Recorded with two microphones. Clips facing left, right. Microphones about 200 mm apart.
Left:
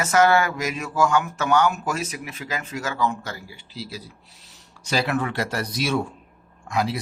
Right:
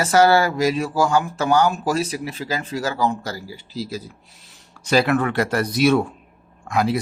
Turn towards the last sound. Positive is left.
turn(degrees=-55)  # may be behind; listen again after turning